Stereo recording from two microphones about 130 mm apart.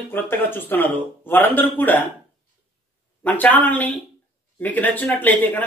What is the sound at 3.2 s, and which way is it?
A man's voice, 15° left (ahead or behind).